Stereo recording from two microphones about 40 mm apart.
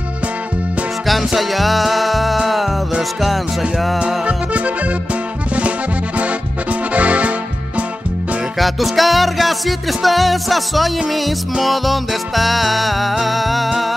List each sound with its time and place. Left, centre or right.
1.0 s music: centre
4.3 s music: right
6.1 s accordion: right
8.5 s music: centre